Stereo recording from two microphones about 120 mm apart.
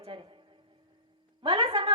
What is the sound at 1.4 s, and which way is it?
Speech, 45° right (ahead or behind).